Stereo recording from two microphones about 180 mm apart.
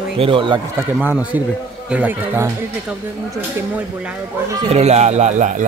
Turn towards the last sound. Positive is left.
turn(degrees=-45)  # may be behind; listen again after turning